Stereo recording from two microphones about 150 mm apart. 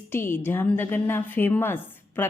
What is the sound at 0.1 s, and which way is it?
Speech, 15° left (ahead or behind).